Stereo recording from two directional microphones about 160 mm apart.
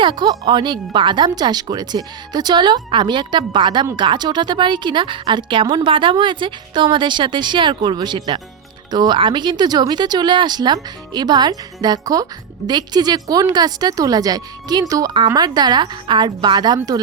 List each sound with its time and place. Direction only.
0.0 s speech: 30° right (ahead or behind)